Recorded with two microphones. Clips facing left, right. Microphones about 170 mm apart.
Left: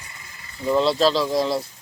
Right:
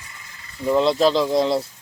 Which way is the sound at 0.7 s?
15° right (ahead or behind).